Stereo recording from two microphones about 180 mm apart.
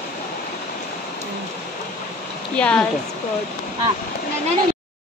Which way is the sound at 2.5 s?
5° left (ahead or behind).